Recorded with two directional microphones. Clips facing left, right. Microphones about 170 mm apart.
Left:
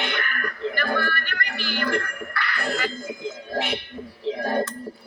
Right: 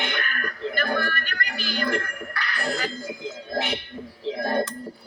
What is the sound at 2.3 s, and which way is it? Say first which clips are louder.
Music: left 1 dB; 40° right (ahead or behind).